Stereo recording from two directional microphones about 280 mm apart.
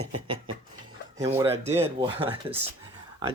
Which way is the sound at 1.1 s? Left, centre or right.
Centre.